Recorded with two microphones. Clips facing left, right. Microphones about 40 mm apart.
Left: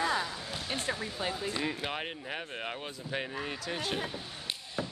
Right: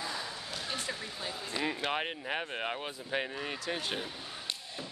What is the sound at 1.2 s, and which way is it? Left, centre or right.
Speech, left.